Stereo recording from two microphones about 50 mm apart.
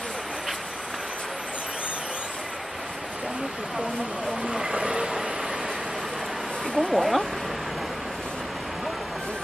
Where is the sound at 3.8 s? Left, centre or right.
Centre.